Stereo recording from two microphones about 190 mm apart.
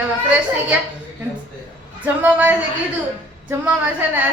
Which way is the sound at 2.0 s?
10° right (ahead or behind).